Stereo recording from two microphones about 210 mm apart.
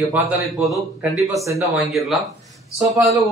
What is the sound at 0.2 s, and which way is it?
Speech, 5° right (ahead or behind).